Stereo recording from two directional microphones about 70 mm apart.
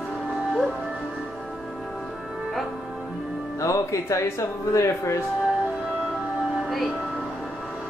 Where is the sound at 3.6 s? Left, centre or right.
Left.